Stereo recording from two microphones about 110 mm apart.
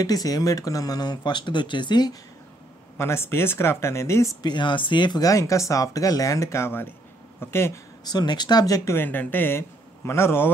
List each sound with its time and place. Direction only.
0.0 s speech: 35° left (ahead or behind)
3.0 s speech: 20° left (ahead or behind)
4.4 s speech: 45° left (ahead or behind); by 7.8 s 25° left (ahead or behind)
8.0 s speech: 40° left (ahead or behind)
8.9 s a man's voice: 20° left (ahead or behind)